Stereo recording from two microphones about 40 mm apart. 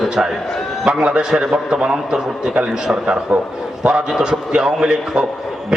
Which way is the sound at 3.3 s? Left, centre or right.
Right.